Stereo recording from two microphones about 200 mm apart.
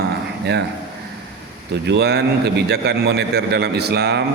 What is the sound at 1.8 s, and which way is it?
A man's voice, 55° right (ahead or behind).